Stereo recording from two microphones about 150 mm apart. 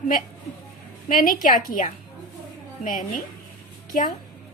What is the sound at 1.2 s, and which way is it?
A woman's voice, 65° left (ahead or behind).